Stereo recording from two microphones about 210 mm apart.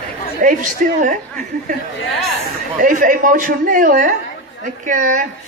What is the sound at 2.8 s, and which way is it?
A man's voice, 40° right (ahead or behind).